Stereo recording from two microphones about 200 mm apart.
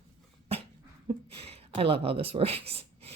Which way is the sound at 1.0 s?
30° right (ahead or behind).